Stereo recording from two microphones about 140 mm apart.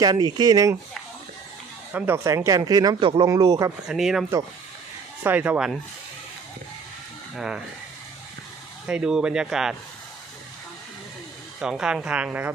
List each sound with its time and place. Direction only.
0.0 s speech: 30° right (ahead or behind)
1.9 s speech: 15° right (ahead or behind); by 3.7 s 30° right (ahead or behind)
3.8 s speech: 5° right (ahead or behind)
5.2 s speech: 15° right (ahead or behind)
7.3 s speech: 5° right (ahead or behind)
8.9 s speech: 5° right (ahead or behind)
11.6 s speech: 5° right (ahead or behind)